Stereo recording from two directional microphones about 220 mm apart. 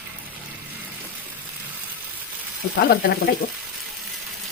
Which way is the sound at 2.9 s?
45° left (ahead or behind).